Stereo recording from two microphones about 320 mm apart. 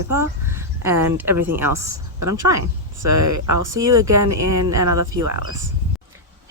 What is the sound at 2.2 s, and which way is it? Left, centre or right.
Speech, right.